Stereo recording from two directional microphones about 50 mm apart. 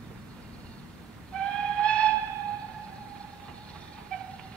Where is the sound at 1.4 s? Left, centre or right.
Left.